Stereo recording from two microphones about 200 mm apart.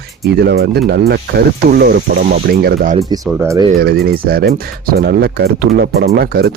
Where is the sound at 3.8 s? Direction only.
50° right (ahead or behind).